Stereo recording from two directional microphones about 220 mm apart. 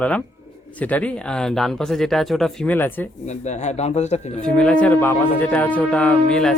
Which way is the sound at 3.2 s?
30° left (ahead or behind).